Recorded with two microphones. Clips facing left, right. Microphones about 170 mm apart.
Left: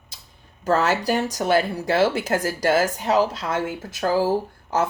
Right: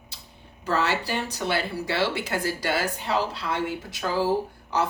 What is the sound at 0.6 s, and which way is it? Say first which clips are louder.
Speech: left 5 dB; 45° left (ahead or behind).